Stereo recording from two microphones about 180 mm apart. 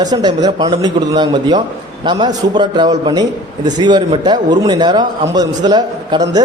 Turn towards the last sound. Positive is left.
turn(degrees=-20)  # may be behind; listen again after turning